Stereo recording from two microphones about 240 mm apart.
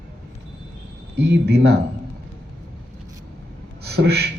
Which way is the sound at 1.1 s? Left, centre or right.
Right.